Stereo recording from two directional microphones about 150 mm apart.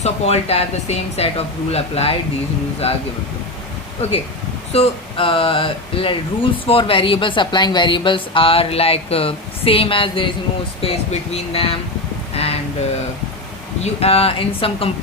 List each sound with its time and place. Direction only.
0.0 s speech: 45° left (ahead or behind)
4.7 s speech: 40° left (ahead or behind)
13.8 s speech: 40° left (ahead or behind)